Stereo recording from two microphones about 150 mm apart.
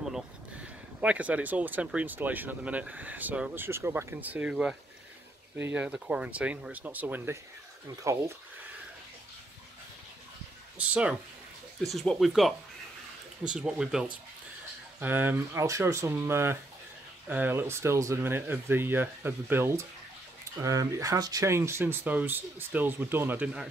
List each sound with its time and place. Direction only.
1.0 s speech: 10° right (ahead or behind)
10.8 s speech: 5° right (ahead or behind)